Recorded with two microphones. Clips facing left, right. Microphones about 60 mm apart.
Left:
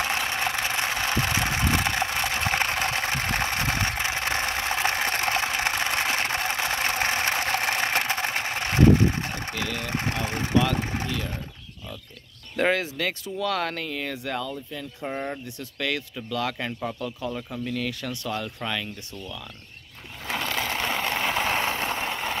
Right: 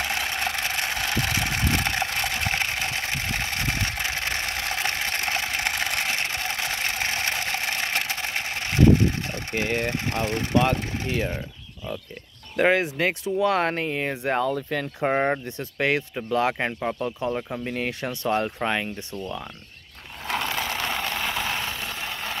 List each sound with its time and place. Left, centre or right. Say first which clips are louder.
0.3 s vehicle: left 1 dB; centre
2.6 s a sound: left 2 dB; left
7.6 s engine: left 3 dB; left
9.5 s speech: right 5 dB; right
10.2 s speech: right 2 dB; left
12.7 s speech: right 4 dB; right
14.4 s speech: right 8 dB; right
15.4 s speech: right 5 dB; right
20.5 s vehicle: even; centre